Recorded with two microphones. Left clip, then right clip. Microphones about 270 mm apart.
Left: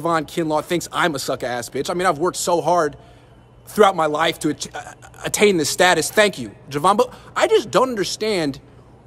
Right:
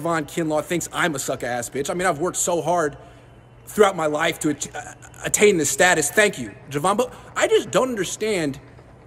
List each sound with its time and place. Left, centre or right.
0.0 s speech: centre